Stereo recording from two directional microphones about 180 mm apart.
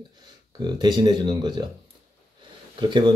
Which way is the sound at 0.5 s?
25° right (ahead or behind).